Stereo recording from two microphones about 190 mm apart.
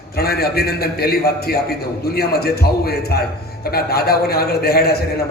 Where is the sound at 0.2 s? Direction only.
55° left (ahead or behind).